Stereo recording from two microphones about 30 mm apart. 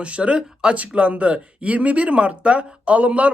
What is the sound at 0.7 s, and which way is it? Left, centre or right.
Speech, right.